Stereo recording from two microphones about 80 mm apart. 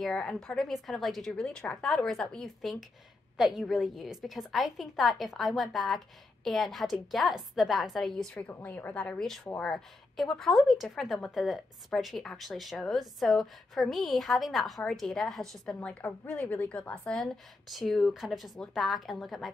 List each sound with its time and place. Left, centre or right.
0.0 s a woman's voice: centre
8.6 s a woman's voice: left
9.2 s a woman's voice: centre
15.6 s a woman's voice: centre
17.2 s a woman's voice: centre